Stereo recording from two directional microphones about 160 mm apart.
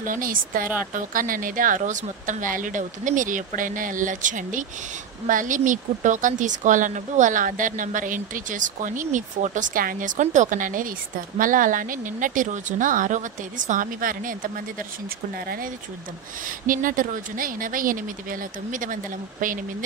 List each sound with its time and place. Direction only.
0.0 s a woman's voice: 60° right (ahead or behind)
15.3 s speech: 65° right (ahead or behind)
16.4 s a woman's voice: 55° right (ahead or behind)